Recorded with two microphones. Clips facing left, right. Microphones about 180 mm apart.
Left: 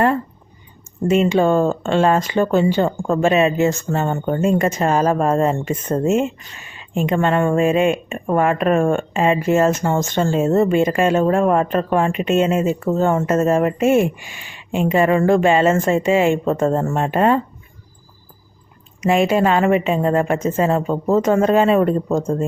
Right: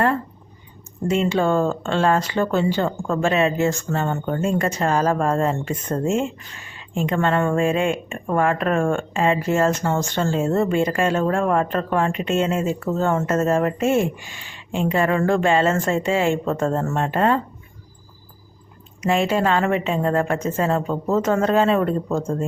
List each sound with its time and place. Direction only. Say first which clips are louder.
1.1 s speech: left 4 dB; 15° left (ahead or behind)
19.0 s speech: left 4 dB; 15° left (ahead or behind)